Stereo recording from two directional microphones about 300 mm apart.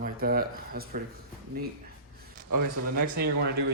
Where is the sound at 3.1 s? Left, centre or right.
Right.